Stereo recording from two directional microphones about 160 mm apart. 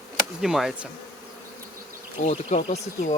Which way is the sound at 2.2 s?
45° left (ahead or behind).